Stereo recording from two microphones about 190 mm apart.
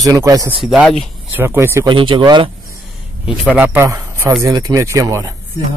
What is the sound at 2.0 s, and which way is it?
Speech, 25° right (ahead or behind).